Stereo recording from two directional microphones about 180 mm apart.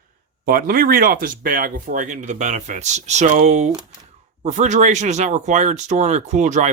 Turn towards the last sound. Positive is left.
turn(degrees=-40)  # may be behind; listen again after turning